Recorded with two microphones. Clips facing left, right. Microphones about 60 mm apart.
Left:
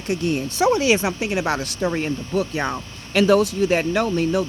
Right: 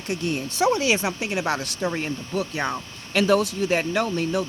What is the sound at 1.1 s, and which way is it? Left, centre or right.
Speech, left.